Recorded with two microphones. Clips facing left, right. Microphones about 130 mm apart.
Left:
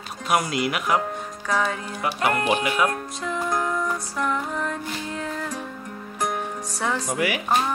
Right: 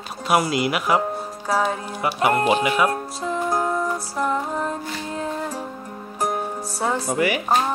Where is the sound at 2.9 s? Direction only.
30° right (ahead or behind).